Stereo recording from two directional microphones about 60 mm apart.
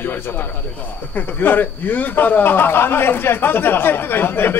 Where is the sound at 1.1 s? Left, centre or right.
Left.